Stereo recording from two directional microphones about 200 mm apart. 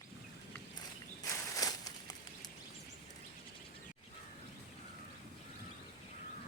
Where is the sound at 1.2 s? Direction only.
15° left (ahead or behind).